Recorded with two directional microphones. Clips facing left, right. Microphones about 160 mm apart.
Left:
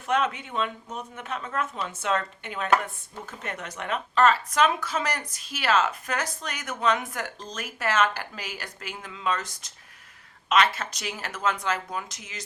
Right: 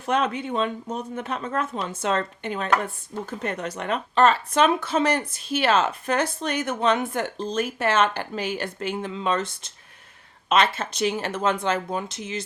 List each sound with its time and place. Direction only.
0.0 s a woman's voice: 35° right (ahead or behind)